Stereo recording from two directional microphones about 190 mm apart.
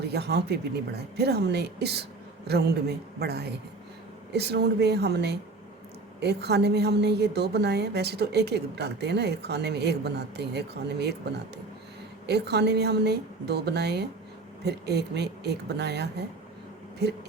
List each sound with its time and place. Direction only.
0.0 s a woman's voice: 60° right (ahead or behind)
12.2 s a woman's voice: 60° right (ahead or behind)